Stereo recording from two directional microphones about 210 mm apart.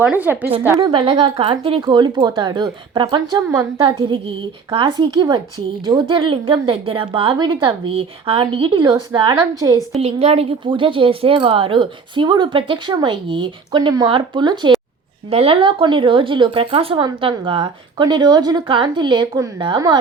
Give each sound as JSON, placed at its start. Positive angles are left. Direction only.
{"t": 0.0, "sound": "a woman's voice", "side_deg": -10}
{"t": 0.8, "sound": "a woman's voice", "side_deg": -25}
{"t": 9.9, "sound": "a woman's voice", "side_deg": -30}